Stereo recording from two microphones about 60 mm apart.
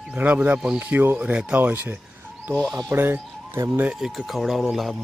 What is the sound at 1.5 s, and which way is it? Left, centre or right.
Speech, right.